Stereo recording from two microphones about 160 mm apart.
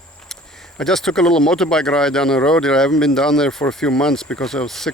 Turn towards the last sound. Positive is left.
turn(degrees=5)  # may be behind; listen again after turning